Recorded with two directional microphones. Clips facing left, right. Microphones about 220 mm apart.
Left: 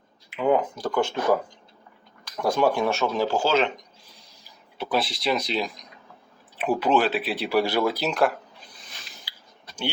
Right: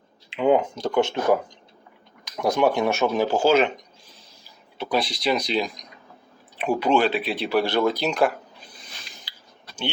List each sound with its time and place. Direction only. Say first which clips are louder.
0.3 s speech: right 2 dB; 25° right (ahead or behind)
4.8 s speech: right 1 dB; centre (ahead or behind)
8.8 s a sound: right 1 dB; centre (ahead or behind)